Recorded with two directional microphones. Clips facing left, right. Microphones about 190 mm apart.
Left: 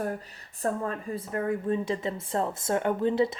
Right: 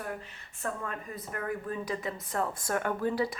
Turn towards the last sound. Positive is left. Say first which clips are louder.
# left 5 dB
turn(degrees=25)  # may be behind; listen again after turning